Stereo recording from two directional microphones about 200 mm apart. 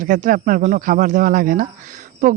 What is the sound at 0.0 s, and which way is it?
Speech, 40° right (ahead or behind).